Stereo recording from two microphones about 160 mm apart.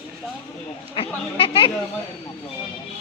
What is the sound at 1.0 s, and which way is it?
Speech, 35° left (ahead or behind).